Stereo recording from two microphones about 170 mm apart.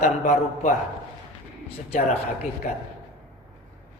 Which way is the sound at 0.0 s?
45° left (ahead or behind).